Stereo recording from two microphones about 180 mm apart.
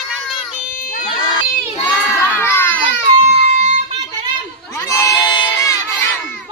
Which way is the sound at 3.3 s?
35° right (ahead or behind).